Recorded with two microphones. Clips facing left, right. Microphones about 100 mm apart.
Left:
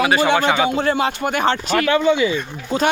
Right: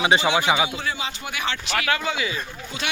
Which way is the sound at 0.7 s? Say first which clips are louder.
Left 11 dB; 55° left (ahead or behind).